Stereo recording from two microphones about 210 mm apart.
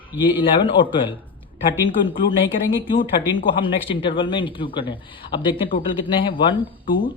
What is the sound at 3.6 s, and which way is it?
Speech, 25° left (ahead or behind).